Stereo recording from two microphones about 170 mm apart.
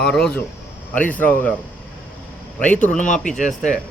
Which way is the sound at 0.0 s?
5° left (ahead or behind).